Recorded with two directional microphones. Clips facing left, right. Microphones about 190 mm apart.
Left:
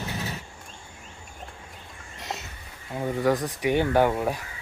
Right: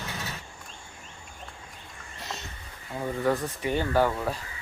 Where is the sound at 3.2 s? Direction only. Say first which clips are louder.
Left 3 dB; 15° left (ahead or behind).